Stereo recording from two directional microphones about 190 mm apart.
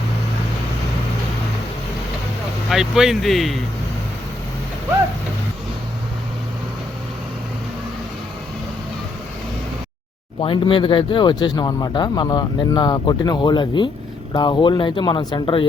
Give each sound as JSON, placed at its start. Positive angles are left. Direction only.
{"t": 2.6, "sound": "speech", "side_deg": 0}
{"t": 10.4, "sound": "speech", "side_deg": 25}